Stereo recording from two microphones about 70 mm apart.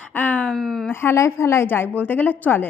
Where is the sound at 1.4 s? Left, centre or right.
Left.